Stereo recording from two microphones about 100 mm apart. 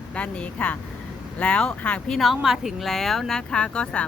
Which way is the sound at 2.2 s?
5° right (ahead or behind).